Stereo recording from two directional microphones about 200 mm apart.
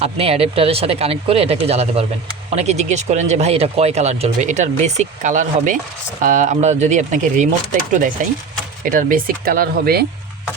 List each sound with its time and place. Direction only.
0.0 s speech: 30° right (ahead or behind); by 10.1 s 50° right (ahead or behind)